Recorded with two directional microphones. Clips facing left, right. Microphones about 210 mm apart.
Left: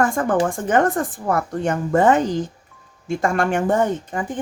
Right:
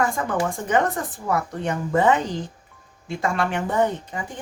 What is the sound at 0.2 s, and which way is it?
Speech, 55° left (ahead or behind).